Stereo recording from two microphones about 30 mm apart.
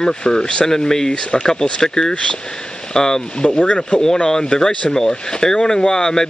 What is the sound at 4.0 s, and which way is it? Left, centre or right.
Speech, centre.